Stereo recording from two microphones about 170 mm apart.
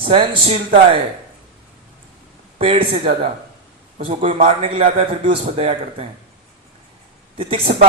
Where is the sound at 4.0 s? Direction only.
40° right (ahead or behind).